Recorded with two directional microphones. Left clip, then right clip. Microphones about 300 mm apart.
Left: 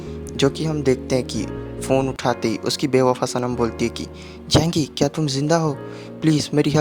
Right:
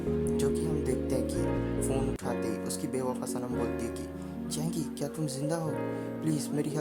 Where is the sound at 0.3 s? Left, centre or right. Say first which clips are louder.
Left 9 dB; right.